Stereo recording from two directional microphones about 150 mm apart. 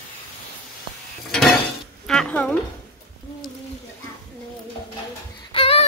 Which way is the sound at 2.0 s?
5° left (ahead or behind).